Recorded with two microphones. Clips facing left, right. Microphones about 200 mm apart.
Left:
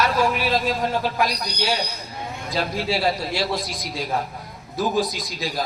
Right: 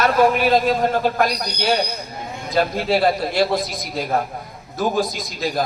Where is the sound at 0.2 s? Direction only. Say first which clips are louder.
Right 6 dB; 55° right (ahead or behind).